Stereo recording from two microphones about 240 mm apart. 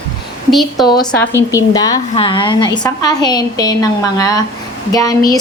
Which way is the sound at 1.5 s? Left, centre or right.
Centre.